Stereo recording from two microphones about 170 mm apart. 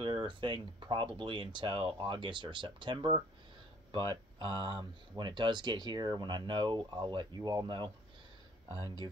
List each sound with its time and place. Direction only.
0.0 s speech: 30° right (ahead or behind)